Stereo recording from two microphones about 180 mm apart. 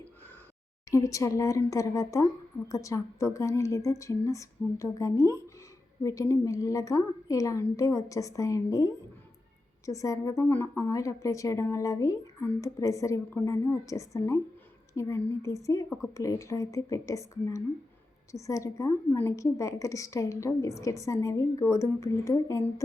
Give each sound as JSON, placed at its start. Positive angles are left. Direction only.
{"t": 0.9, "sound": "a woman's voice", "side_deg": 15}